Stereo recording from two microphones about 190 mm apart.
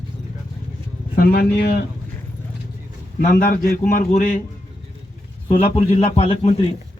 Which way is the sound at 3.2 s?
45° left (ahead or behind).